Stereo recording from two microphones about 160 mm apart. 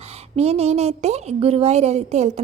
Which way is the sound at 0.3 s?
40° right (ahead or behind).